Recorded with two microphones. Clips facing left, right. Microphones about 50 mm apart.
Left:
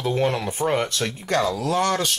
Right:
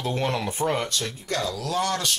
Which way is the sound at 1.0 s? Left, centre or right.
Left.